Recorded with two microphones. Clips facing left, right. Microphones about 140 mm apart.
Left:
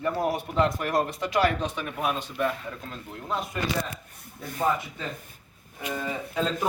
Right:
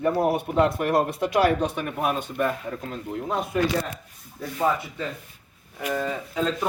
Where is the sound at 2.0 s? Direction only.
50° right (ahead or behind).